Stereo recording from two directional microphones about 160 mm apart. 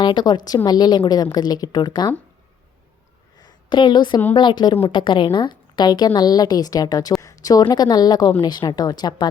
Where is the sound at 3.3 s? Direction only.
25° left (ahead or behind).